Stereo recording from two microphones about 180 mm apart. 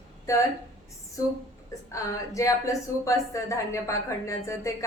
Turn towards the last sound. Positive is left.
turn(degrees=15)  # may be behind; listen again after turning